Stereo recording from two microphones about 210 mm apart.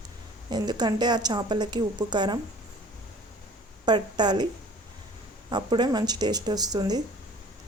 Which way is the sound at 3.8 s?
20° right (ahead or behind).